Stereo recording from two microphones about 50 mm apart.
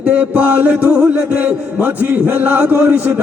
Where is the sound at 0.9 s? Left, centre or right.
Right.